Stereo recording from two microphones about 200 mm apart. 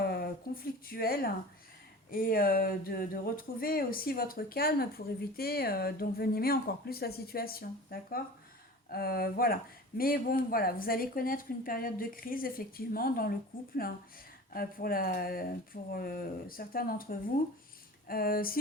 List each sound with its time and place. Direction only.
0.0 s a sound: 45° left (ahead or behind)
2.0 s speech: 45° left (ahead or behind)
14.5 s speech: 45° left (ahead or behind)